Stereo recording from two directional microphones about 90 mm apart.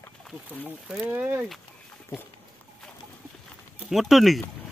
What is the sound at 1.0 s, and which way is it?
Speech, 25° right (ahead or behind).